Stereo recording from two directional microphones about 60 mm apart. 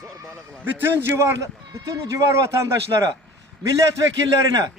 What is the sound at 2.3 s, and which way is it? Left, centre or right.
A man's voice, right.